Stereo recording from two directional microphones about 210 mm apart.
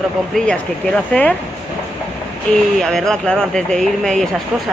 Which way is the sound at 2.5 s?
5° left (ahead or behind).